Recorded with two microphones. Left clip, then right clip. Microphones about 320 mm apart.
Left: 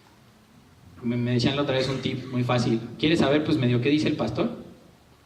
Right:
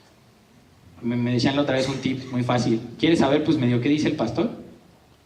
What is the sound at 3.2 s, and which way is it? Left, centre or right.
A man's voice, left.